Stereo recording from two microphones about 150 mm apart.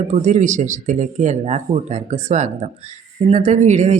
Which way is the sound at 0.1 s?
50° right (ahead or behind).